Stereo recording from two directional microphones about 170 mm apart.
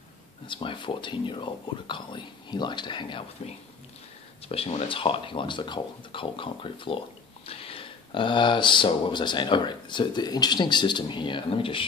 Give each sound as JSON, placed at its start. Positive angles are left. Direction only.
{"t": 0.5, "sound": "speech", "side_deg": 30}
{"t": 4.5, "sound": "speech", "side_deg": 35}